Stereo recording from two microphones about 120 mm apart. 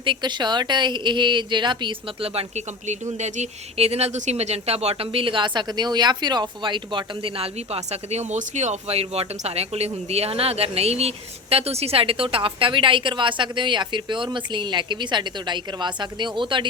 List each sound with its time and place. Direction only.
0.0 s a woman's voice: 40° right (ahead or behind)